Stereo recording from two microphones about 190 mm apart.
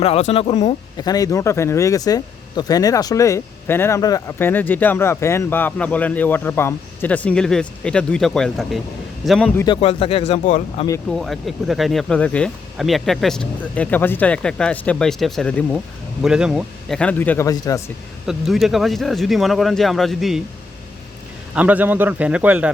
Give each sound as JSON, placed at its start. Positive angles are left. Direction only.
{"t": 0.0, "sound": "speech", "side_deg": 30}
{"t": 0.9, "sound": "speech", "side_deg": 20}
{"t": 9.6, "sound": "speech", "side_deg": 30}
{"t": 10.4, "sound": "speech", "side_deg": 40}
{"t": 11.1, "sound": "speech", "side_deg": 0}
{"t": 18.3, "sound": "speech", "side_deg": 0}
{"t": 21.5, "sound": "a man's voice", "side_deg": -10}